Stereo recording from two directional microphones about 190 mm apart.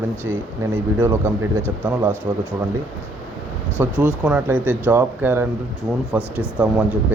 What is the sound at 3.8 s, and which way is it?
Speech, 15° right (ahead or behind).